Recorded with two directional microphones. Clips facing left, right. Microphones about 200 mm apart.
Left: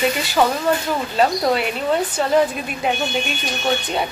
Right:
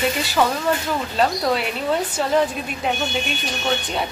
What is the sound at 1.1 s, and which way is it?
Speech, 5° left (ahead or behind).